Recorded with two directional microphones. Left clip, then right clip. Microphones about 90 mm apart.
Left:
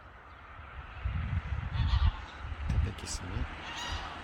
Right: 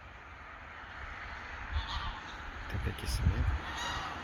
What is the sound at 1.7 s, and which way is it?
Honk, 20° right (ahead or behind).